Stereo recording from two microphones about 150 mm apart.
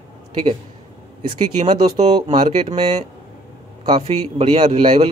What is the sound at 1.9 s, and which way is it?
Speech, 45° right (ahead or behind).